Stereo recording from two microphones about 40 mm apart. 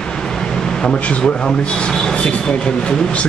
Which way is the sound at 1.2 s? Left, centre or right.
Left.